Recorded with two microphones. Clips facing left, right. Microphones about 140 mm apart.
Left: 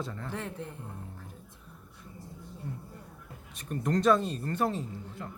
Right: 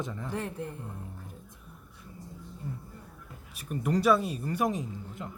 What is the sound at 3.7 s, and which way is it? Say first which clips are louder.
Speech: even; 10° right (ahead or behind).